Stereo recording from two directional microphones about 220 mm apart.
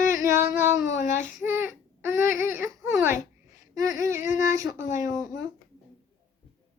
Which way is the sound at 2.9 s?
10° right (ahead or behind).